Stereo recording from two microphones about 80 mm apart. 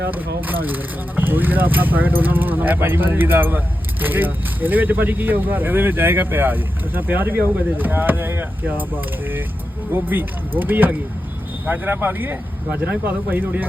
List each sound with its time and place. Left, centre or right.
0.1 s speech: right
9.9 s speech: right